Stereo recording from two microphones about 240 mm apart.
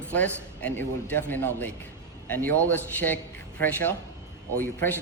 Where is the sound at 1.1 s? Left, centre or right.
Centre.